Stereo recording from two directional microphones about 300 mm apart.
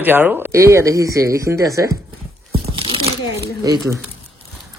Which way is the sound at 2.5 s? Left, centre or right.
Centre.